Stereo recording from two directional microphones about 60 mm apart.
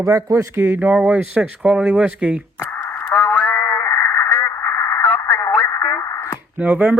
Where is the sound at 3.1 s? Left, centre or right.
Left.